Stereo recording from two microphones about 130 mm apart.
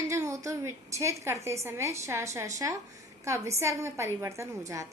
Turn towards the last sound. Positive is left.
turn(degrees=-25)  # may be behind; listen again after turning